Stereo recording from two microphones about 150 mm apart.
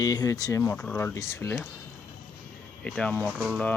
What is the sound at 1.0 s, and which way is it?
Speech, 15° left (ahead or behind).